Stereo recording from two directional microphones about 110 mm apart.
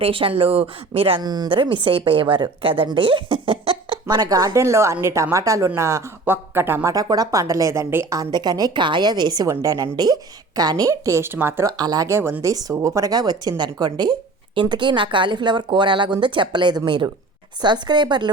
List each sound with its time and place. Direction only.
0.0 s speech: 55° right (ahead or behind)
1.2 s speech: 40° right (ahead or behind)
1.6 s speech: 50° right (ahead or behind)
4.1 s a woman's voice: 35° right (ahead or behind); by 6.9 s 20° right (ahead or behind)
6.9 s a woman's voice: 35° right (ahead or behind)
11.6 s a woman's voice: 35° right (ahead or behind)